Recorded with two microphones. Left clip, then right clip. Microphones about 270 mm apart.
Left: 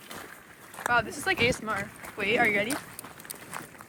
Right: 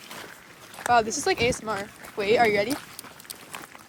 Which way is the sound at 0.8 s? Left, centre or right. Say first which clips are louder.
Right 4 dB; centre.